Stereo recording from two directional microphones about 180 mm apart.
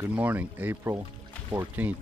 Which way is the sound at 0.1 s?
10° right (ahead or behind).